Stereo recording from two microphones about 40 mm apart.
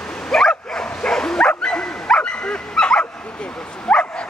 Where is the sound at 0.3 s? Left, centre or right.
Centre.